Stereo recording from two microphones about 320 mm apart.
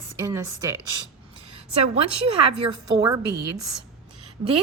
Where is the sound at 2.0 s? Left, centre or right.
Right.